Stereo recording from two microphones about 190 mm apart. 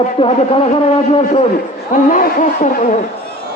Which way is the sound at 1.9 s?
45° left (ahead or behind).